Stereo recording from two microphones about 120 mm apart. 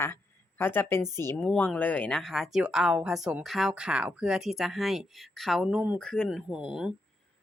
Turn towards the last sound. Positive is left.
turn(degrees=-5)  # may be behind; listen again after turning